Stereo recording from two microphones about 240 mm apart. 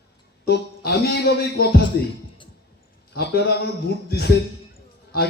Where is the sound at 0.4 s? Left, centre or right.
Left.